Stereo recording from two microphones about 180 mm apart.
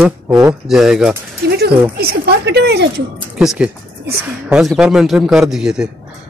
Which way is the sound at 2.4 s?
70° right (ahead or behind).